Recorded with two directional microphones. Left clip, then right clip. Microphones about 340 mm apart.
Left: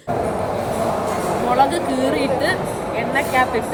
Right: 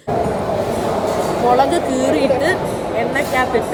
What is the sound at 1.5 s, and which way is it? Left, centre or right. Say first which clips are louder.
A woman's voice: right 2 dB; centre.